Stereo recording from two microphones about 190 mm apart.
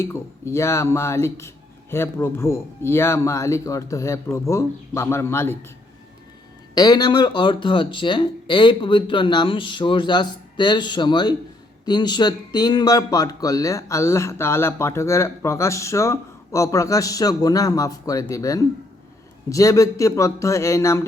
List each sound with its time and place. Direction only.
0.0 s speech: 15° left (ahead or behind)
6.7 s speech: 20° left (ahead or behind)